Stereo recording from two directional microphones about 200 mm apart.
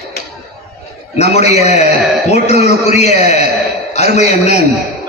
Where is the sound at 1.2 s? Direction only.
35° left (ahead or behind).